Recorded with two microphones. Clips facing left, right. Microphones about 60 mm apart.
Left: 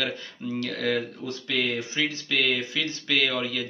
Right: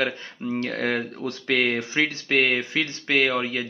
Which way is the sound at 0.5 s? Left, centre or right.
Right.